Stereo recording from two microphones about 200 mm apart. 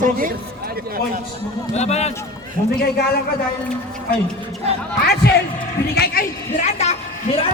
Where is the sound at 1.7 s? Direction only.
35° left (ahead or behind).